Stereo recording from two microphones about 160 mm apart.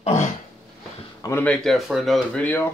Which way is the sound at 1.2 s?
10° left (ahead or behind).